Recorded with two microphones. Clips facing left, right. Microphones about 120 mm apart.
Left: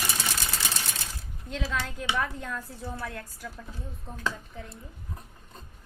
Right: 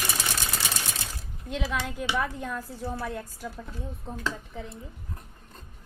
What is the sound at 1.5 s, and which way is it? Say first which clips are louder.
A woman's voice: right 2 dB; 15° right (ahead or behind).